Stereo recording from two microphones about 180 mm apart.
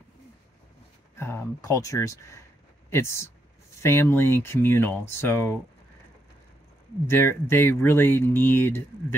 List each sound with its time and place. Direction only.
1.1 s speech: 15° left (ahead or behind)
7.1 s speech: 10° left (ahead or behind)